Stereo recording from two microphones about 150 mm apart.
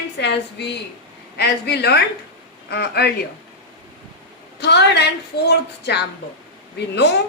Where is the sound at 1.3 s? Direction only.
90° left.